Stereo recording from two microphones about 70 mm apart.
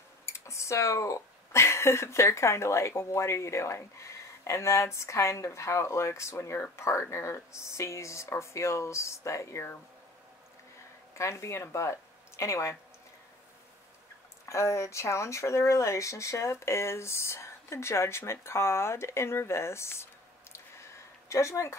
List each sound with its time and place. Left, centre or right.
0.2 s speech: left
11.1 s speech: left
14.4 s speech: left
20.5 s a sound: left